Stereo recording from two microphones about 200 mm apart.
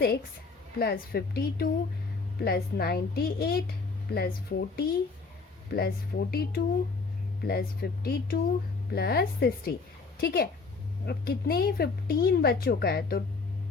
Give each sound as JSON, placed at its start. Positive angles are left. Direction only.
{"t": 0.8, "sound": "speech", "side_deg": 50}